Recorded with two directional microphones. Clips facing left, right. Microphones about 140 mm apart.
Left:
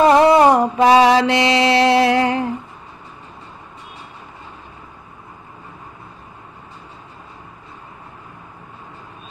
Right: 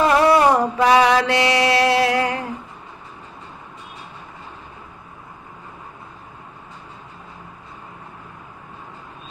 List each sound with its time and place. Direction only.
0.1 s mantra: 20° left (ahead or behind)